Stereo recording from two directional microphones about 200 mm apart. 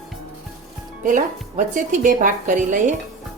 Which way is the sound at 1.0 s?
40° right (ahead or behind).